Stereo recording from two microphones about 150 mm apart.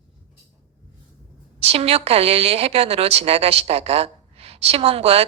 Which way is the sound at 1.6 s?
40° right (ahead or behind).